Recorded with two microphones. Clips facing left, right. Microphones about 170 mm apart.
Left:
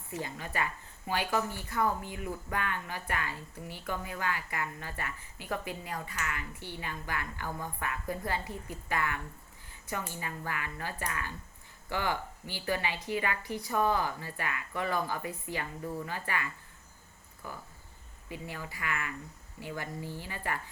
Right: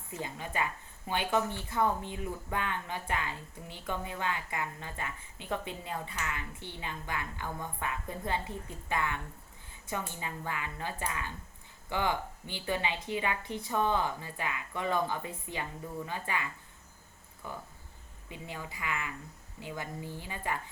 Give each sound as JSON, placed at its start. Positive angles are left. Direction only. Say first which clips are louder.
{"t": 0.2, "sound": "speech", "louder": "right 1 dB", "side_deg": -20}
{"t": 18.3, "sound": "speech", "louder": "left 1 dB", "side_deg": -20}